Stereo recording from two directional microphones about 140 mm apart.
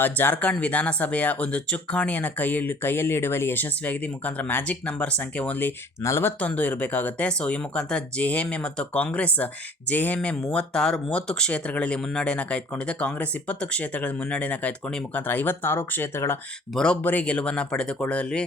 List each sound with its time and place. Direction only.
0.0 s speech: 15° left (ahead or behind)
16.7 s speech: 5° left (ahead or behind)